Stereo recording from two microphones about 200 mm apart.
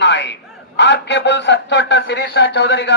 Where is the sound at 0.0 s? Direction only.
60° left (ahead or behind).